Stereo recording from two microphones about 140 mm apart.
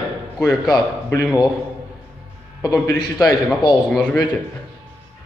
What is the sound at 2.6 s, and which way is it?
Speech, 30° left (ahead or behind).